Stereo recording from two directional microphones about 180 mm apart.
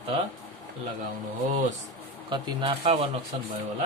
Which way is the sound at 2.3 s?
25° right (ahead or behind).